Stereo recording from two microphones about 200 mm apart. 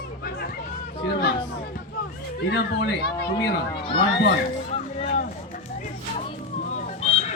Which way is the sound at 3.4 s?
25° left (ahead or behind).